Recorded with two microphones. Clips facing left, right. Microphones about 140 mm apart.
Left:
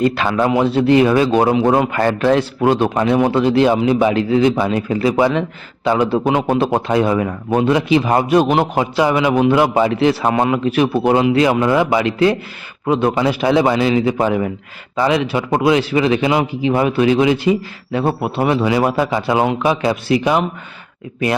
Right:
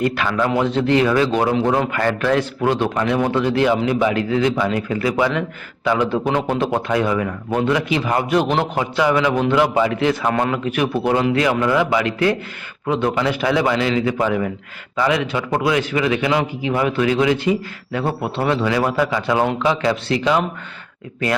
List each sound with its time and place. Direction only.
0.0 s a man's voice: 25° left (ahead or behind)